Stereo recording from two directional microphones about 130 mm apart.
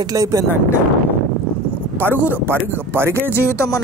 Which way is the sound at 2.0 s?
15° right (ahead or behind).